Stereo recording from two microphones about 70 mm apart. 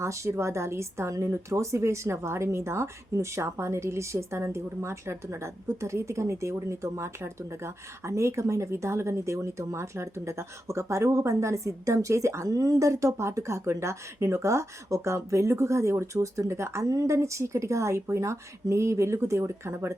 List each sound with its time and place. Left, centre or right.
0.0 s a woman's voice: right